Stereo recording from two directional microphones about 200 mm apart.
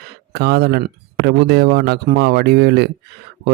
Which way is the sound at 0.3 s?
55° right (ahead or behind).